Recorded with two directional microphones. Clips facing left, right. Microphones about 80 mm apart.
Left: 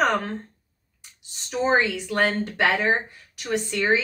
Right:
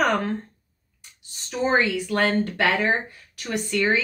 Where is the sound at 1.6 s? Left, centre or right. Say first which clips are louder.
Even; centre.